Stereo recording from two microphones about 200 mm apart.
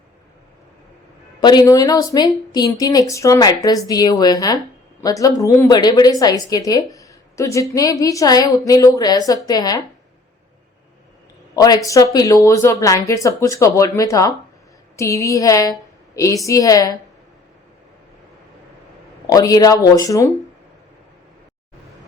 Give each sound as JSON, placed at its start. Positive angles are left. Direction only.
{"t": 1.4, "sound": "speech", "side_deg": 20}
{"t": 11.5, "sound": "speech", "side_deg": 20}
{"t": 19.3, "sound": "speech", "side_deg": 20}